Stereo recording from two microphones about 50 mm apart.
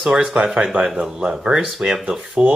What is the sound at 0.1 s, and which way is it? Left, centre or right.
Speech, centre.